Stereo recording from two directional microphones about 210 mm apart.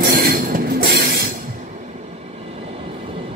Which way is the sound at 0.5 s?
50° right (ahead or behind).